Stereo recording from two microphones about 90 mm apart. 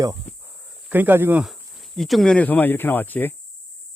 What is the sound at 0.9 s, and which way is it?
Speech, 20° right (ahead or behind).